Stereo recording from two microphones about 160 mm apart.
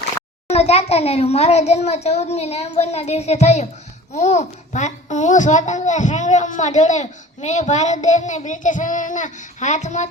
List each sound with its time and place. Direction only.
0.5 s a child's voice: 40° left (ahead or behind)